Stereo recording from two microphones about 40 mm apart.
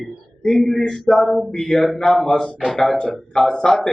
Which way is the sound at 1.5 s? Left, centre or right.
Centre.